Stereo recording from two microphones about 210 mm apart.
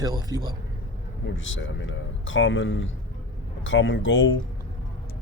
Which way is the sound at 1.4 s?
65° left (ahead or behind).